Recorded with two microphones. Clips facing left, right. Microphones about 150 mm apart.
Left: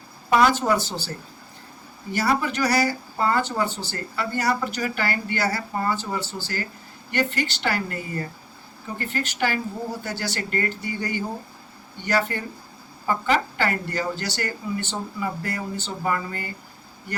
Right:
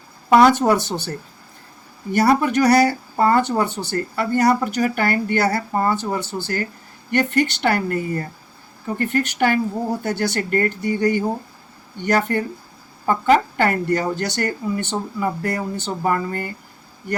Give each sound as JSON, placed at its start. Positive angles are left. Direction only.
{"t": 0.3, "sound": "speech", "side_deg": -55}
{"t": 2.1, "sound": "speech", "side_deg": -55}